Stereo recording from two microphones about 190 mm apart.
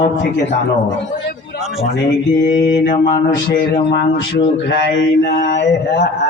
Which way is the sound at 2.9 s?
45° left (ahead or behind).